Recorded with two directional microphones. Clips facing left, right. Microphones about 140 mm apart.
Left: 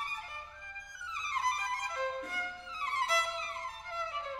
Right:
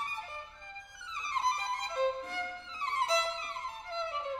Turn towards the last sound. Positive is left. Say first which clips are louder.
# right 3 dB
turn(degrees=-25)  # may be behind; listen again after turning